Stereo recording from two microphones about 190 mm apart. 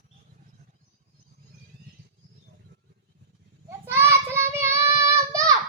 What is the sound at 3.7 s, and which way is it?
Child singing, 10° right (ahead or behind).